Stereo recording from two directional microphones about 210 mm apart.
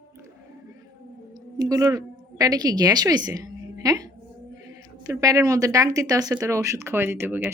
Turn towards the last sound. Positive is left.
turn(degrees=-10)  # may be behind; listen again after turning